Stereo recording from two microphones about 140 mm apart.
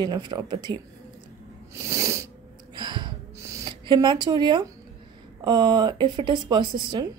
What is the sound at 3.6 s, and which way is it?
Speech, 35° right (ahead or behind).